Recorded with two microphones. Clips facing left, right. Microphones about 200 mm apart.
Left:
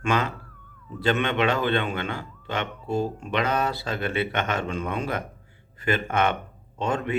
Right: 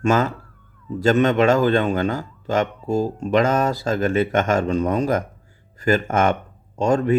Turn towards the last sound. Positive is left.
turn(degrees=-40)  # may be behind; listen again after turning